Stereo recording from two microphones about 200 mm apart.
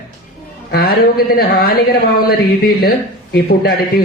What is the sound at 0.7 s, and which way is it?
A man's voice, 50° left (ahead or behind).